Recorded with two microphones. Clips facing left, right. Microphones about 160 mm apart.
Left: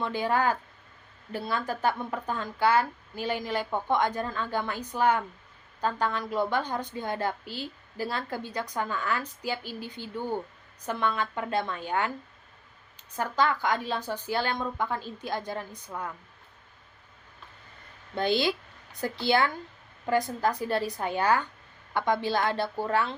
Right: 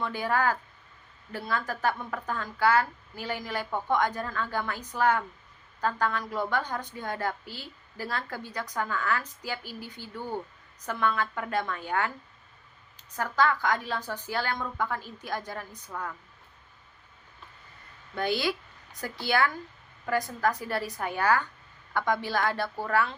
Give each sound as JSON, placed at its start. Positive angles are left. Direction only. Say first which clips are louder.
{"t": 0.0, "sound": "a woman's voice", "louder": "left 1 dB", "side_deg": 20}
{"t": 18.1, "sound": "a woman's voice", "louder": "left 2 dB", "side_deg": 25}